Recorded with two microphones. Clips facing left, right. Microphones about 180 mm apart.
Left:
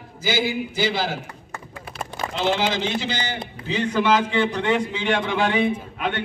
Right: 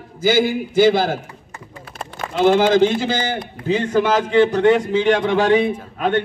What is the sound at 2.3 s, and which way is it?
A man's voice, 50° right (ahead or behind).